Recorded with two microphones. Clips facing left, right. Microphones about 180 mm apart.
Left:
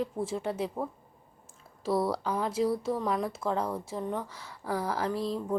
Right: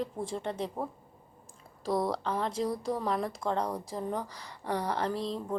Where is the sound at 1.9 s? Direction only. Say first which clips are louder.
Left 2 dB; 5° left (ahead or behind).